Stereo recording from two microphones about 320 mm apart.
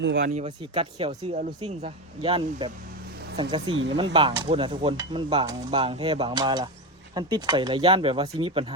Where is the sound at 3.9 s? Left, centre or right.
Centre.